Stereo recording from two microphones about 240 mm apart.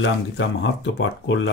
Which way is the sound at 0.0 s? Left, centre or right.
Left.